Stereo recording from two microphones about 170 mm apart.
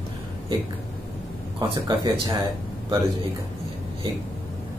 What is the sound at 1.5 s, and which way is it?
Speech, 30° right (ahead or behind).